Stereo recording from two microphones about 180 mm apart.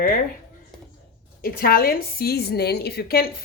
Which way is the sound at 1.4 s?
55° left (ahead or behind).